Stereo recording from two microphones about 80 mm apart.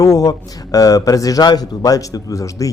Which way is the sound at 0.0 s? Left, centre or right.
Left.